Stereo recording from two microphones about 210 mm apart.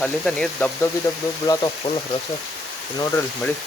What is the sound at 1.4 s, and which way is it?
Speech, 15° left (ahead or behind).